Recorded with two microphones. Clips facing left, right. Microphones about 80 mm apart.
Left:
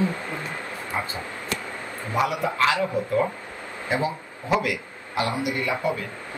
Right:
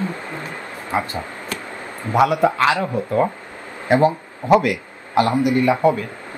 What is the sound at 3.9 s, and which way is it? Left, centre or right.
A man's voice, right.